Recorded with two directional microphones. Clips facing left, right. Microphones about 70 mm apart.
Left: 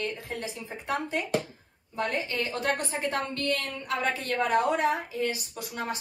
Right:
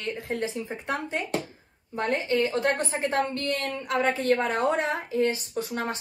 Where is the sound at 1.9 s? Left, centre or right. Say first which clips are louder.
Right 4 dB; right.